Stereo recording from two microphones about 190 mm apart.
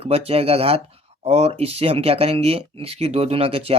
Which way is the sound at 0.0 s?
30° right (ahead or behind).